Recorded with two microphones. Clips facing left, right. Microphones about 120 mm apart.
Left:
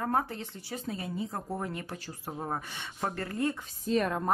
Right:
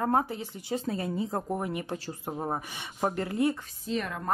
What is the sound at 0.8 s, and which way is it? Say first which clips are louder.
Speech: right 1 dB; 35° right (ahead or behind).